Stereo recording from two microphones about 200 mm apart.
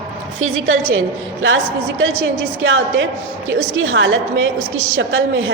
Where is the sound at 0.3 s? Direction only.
85° right.